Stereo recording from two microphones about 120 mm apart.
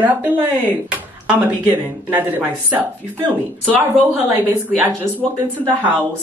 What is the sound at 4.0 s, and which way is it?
Speech, 15° right (ahead or behind).